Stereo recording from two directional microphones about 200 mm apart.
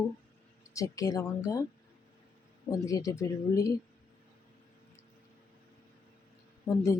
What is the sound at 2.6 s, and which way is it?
Speech, 20° left (ahead or behind).